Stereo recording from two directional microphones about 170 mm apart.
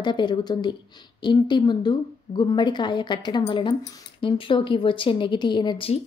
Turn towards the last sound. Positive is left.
turn(degrees=30)  # may be behind; listen again after turning